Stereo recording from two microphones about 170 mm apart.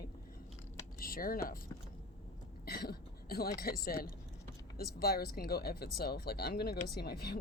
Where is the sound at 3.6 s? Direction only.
60° left (ahead or behind).